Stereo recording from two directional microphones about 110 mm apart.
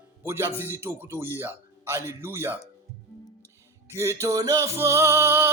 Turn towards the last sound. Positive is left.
turn(degrees=-25)  # may be behind; listen again after turning